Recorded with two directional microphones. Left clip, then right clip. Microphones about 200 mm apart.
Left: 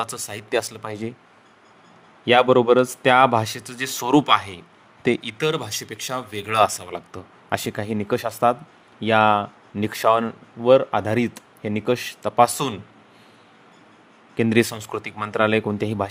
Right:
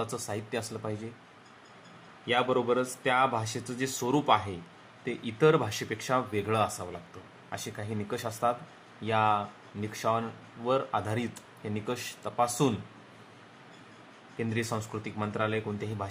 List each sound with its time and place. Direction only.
0.3 s speech: 50° left (ahead or behind)
2.2 s speech: 60° left (ahead or behind)
5.5 s speech: centre (ahead or behind)
7.5 s speech: 50° left (ahead or behind)
14.3 s speech: 55° left (ahead or behind)